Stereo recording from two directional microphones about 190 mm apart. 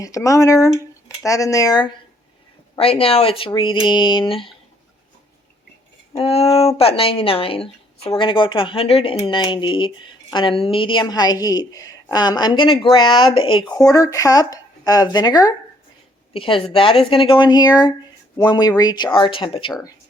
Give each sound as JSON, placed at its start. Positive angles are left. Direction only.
{"t": 0.0, "sound": "speech", "side_deg": 15}
{"t": 2.7, "sound": "a woman's voice", "side_deg": 30}
{"t": 6.1, "sound": "a sound", "side_deg": 30}
{"t": 6.7, "sound": "a woman's voice", "side_deg": 30}